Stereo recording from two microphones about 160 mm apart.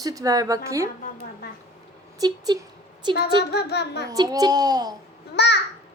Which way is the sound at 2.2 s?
25° right (ahead or behind).